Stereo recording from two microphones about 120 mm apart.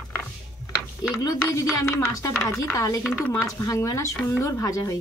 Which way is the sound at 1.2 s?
25° left (ahead or behind).